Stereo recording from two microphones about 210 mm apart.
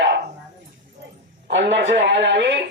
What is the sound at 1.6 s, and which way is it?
A man's voice, 60° right (ahead or behind).